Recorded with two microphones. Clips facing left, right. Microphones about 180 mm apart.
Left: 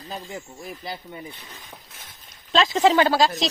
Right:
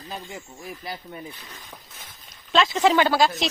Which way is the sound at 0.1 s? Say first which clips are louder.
Left 1 dB; 35° left (ahead or behind).